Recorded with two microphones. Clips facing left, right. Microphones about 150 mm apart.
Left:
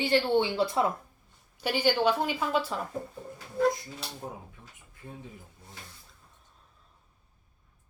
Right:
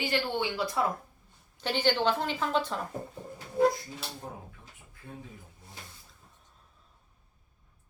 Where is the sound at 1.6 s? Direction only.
10° left (ahead or behind).